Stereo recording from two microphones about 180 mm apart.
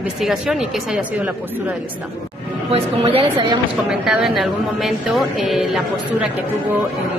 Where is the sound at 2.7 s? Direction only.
30° right (ahead or behind).